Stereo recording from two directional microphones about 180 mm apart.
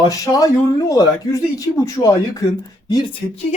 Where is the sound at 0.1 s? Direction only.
20° left (ahead or behind).